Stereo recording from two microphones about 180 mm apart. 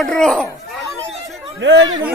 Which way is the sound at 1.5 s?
90° right.